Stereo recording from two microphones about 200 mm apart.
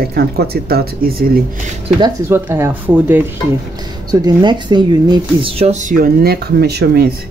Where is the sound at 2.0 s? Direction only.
10° right (ahead or behind).